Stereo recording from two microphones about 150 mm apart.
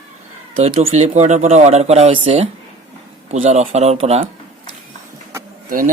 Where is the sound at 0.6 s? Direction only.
40° right (ahead or behind).